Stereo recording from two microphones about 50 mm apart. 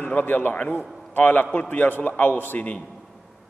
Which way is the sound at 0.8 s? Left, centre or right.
Centre.